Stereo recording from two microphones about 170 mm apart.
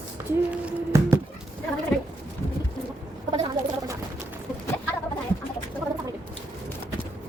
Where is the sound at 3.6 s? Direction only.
50° right (ahead or behind).